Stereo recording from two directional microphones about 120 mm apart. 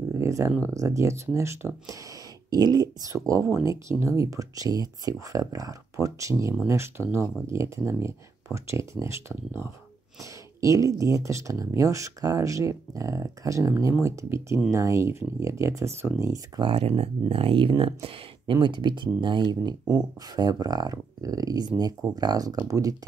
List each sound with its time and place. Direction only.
0.2 s a sound: 25° right (ahead or behind)
0.7 s speech: 25° right (ahead or behind)
2.5 s speech: 35° right (ahead or behind)
16.6 s speech: 55° right (ahead or behind)
19.8 s speech: 5° right (ahead or behind)
20.3 s speech: 35° right (ahead or behind)